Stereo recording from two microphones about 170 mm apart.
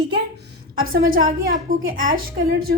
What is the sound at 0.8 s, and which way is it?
A woman's voice, 60° right (ahead or behind).